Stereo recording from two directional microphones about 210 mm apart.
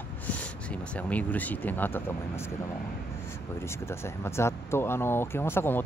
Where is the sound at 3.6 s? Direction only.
10° left (ahead or behind).